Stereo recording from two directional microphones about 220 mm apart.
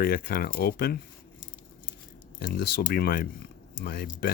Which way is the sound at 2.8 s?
45° left (ahead or behind).